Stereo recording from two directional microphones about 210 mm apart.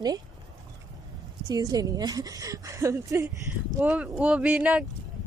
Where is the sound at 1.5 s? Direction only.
20° right (ahead or behind).